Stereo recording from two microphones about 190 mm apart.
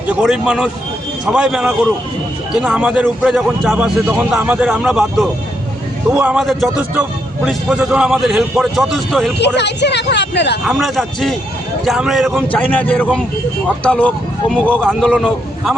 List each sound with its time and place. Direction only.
0.1 s a man's voice: 5° right (ahead or behind)
9.6 s a woman's voice: 65° left (ahead or behind)
10.7 s a man's voice: centre (ahead or behind)